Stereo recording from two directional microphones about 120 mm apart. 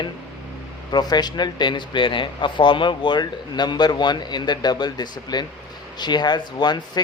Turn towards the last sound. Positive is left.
turn(degrees=35)  # may be behind; listen again after turning